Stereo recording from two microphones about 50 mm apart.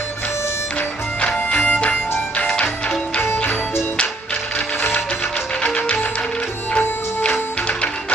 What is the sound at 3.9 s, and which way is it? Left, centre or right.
Music, left.